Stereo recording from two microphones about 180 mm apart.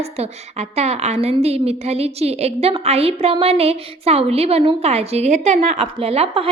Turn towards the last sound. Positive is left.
turn(degrees=-35)  # may be behind; listen again after turning